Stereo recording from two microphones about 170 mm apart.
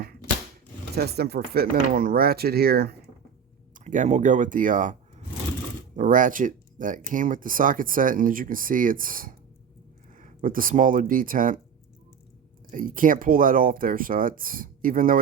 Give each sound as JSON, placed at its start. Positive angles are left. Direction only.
{"t": 0.9, "sound": "speech", "side_deg": -70}
{"t": 3.8, "sound": "speech", "side_deg": -45}
{"t": 12.7, "sound": "speech", "side_deg": -55}